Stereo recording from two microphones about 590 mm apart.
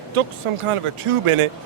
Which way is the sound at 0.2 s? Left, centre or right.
Right.